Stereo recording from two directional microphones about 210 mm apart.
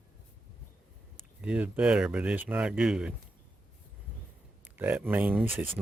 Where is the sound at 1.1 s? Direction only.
5° right (ahead or behind).